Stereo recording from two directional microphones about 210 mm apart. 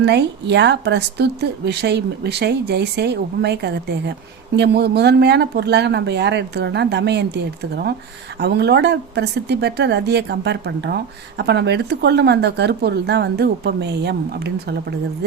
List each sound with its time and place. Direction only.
0.0 s speech: 55° right (ahead or behind)